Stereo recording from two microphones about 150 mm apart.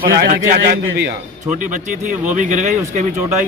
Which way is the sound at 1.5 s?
60° right (ahead or behind).